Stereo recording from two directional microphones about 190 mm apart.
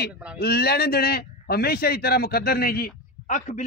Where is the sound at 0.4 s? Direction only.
55° left (ahead or behind).